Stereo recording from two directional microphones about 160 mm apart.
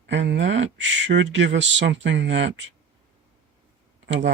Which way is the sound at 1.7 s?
90° right.